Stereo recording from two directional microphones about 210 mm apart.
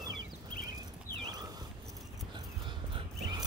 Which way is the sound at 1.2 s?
15° right (ahead or behind).